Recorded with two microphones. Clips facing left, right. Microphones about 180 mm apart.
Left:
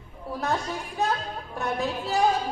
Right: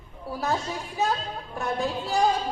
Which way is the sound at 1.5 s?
Centre (ahead or behind).